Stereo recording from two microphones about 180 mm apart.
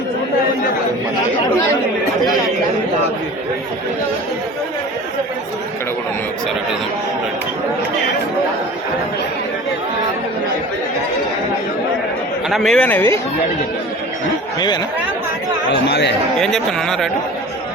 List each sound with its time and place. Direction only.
12.5 s speech: centre (ahead or behind)
15.7 s speech: 70° left (ahead or behind)
16.4 s speech: 5° left (ahead or behind)